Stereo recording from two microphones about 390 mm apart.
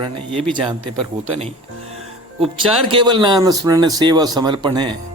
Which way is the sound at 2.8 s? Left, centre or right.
Centre.